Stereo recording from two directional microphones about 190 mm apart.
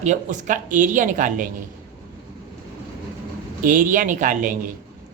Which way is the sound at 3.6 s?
45° right (ahead or behind).